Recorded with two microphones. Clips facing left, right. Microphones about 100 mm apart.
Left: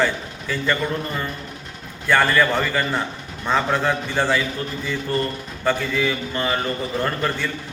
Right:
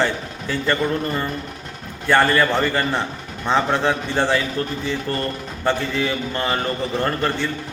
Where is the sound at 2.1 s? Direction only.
30° right (ahead or behind).